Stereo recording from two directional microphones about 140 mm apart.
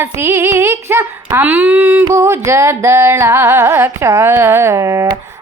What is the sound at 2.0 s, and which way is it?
Music, 20° right (ahead or behind).